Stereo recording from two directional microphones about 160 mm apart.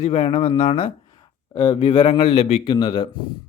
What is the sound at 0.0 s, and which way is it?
Speech, 35° left (ahead or behind).